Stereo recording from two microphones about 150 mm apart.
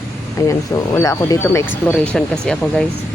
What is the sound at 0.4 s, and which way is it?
Speech, 20° left (ahead or behind).